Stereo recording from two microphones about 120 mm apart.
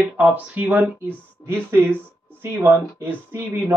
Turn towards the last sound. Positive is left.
turn(degrees=-20)  # may be behind; listen again after turning